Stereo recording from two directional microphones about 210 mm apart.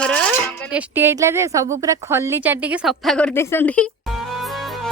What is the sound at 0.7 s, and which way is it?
A woman's voice, 10° right (ahead or behind).